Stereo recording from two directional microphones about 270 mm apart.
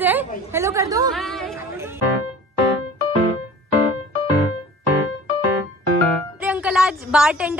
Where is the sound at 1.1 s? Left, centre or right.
Centre.